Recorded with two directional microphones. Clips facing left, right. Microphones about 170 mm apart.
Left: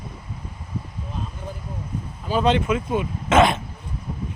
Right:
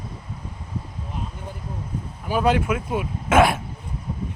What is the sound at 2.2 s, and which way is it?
Speech, 10° right (ahead or behind).